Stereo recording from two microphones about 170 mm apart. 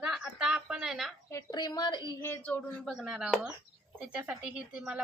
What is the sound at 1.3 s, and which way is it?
Speech, 20° left (ahead or behind).